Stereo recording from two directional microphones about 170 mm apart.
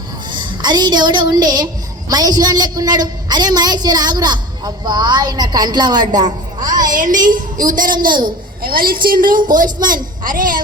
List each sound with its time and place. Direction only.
0.3 s a woman's voice: 25° right (ahead or behind)
6.9 s a woman's voice: 50° right (ahead or behind)